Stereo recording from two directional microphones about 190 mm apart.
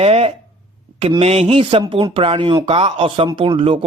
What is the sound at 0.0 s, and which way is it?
Speech, 30° right (ahead or behind).